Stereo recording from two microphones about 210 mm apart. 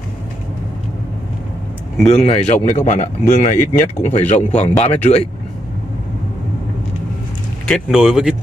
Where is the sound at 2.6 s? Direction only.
35° left (ahead or behind).